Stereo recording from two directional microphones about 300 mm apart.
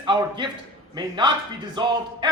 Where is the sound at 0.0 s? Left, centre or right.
Centre.